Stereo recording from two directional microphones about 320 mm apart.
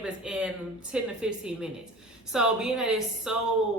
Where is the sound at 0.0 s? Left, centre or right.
Centre.